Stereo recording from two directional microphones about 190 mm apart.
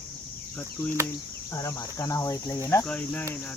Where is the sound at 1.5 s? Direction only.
15° left (ahead or behind).